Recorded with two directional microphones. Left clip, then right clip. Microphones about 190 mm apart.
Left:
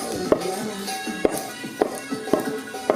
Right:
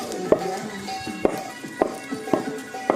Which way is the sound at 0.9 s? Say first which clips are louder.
Left 1 dB; 60° left (ahead or behind).